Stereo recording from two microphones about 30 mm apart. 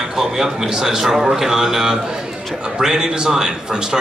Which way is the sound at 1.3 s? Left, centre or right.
Centre.